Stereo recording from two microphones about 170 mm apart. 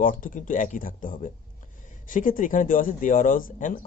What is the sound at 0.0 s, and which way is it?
Speech, 55° left (ahead or behind).